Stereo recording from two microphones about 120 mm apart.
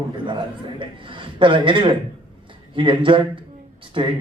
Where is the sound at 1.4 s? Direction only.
45° right (ahead or behind).